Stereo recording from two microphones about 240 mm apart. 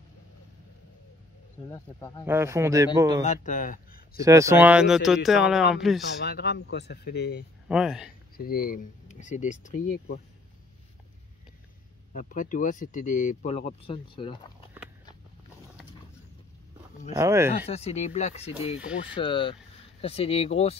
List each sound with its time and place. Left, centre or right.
1.7 s speech: centre
2.2 s a man's voice: centre
3.4 s speech: left
4.2 s speech: centre
6.2 s speech: left
7.6 s speech: centre
8.4 s speech: left
12.1 s speech: left
17.1 s a man's voice: centre
17.6 s speech: left